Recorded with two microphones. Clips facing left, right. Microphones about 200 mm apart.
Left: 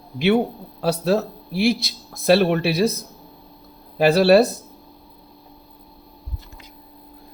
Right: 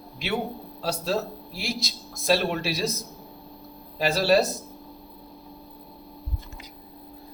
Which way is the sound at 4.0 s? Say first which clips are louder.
Left 8 dB; 60° left (ahead or behind).